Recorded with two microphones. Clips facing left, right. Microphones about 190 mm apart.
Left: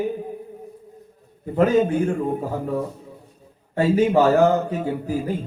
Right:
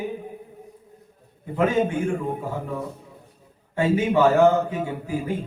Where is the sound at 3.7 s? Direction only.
40° left (ahead or behind).